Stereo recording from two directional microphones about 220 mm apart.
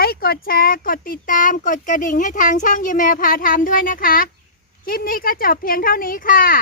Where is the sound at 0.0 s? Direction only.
45° left (ahead or behind).